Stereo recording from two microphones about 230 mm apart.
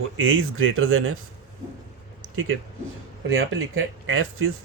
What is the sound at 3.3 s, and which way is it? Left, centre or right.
Speech, right.